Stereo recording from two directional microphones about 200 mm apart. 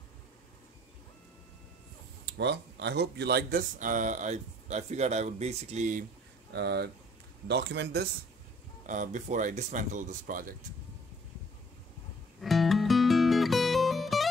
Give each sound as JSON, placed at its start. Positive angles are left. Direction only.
{"t": 2.2, "sound": "speech", "side_deg": -60}
{"t": 6.5, "sound": "speech", "side_deg": -55}
{"t": 8.8, "sound": "speech", "side_deg": -40}
{"t": 12.4, "sound": "music", "side_deg": 0}